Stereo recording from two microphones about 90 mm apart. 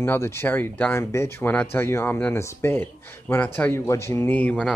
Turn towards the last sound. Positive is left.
turn(degrees=15)  # may be behind; listen again after turning